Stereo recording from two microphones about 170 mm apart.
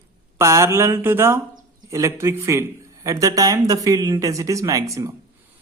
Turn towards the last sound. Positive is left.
turn(degrees=-20)  # may be behind; listen again after turning